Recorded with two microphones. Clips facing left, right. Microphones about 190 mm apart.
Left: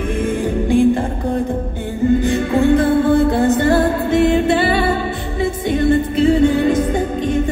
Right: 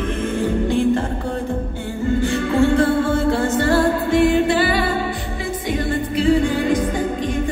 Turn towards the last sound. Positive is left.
turn(degrees=25)  # may be behind; listen again after turning